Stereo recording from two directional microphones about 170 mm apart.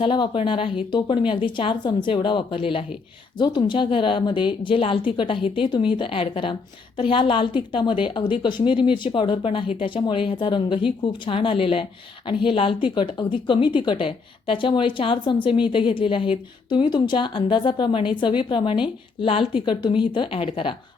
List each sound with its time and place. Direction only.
0.0 s a woman's voice: 30° left (ahead or behind)